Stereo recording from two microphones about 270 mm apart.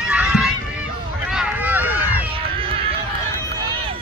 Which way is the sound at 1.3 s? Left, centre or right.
Centre.